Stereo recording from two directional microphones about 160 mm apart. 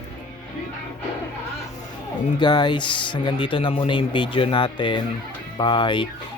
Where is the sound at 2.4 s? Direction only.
25° left (ahead or behind).